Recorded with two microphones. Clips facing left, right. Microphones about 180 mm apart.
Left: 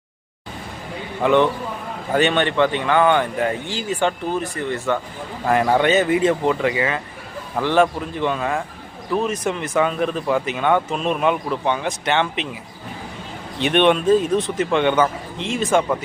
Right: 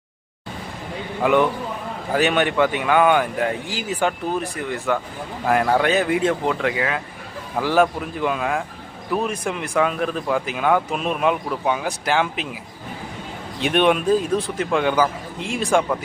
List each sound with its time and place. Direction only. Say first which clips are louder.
1.2 s speech: left 1 dB; 10° right (ahead or behind)
13.6 s speech: left 2 dB; centre (ahead or behind)